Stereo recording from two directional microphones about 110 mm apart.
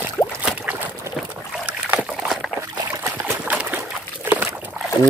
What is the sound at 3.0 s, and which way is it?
Trickle, 20° right (ahead or behind).